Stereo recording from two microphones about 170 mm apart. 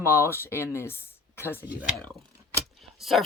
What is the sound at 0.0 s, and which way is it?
Speech, 15° left (ahead or behind).